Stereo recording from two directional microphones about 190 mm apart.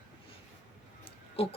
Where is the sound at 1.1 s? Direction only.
30° left (ahead or behind).